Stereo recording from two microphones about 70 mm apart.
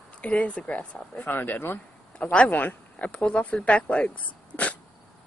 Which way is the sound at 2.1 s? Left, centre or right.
Centre.